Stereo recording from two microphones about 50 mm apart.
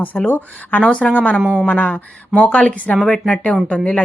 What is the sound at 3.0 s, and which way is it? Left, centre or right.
A woman's voice, centre.